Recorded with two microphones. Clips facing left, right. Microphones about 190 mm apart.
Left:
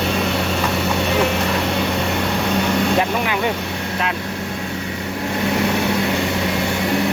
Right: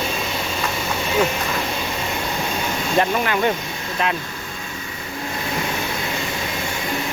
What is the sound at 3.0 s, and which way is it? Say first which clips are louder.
Speech: even; 10° left (ahead or behind).